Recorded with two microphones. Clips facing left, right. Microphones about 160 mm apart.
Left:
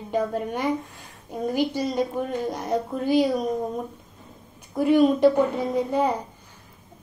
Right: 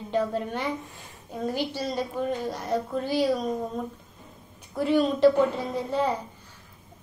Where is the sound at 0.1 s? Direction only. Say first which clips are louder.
Left 1 dB; 10° left (ahead or behind).